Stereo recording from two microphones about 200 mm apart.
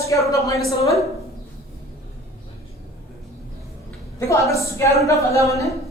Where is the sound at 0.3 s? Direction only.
15° left (ahead or behind).